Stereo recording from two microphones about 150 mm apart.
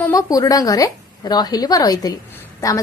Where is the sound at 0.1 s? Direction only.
25° left (ahead or behind).